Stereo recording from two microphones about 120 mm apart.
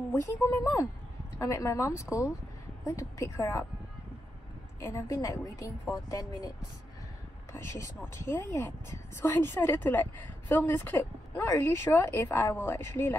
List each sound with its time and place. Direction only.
0.1 s speech: 25° left (ahead or behind)
4.7 s speech: 25° left (ahead or behind)
7.5 s speech: 25° left (ahead or behind)